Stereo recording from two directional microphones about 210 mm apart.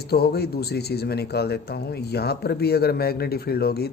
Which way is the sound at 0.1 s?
50° left (ahead or behind).